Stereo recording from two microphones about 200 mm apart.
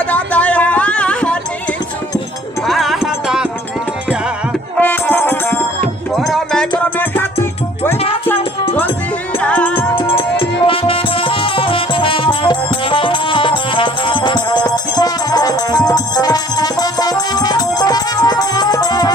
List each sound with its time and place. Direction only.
0.1 s a sound: 5° left (ahead or behind)
2.6 s music: centre (ahead or behind)
4.8 s music: 10° left (ahead or behind)
9.4 s music: 5° left (ahead or behind)
9.9 s music: 25° left (ahead or behind)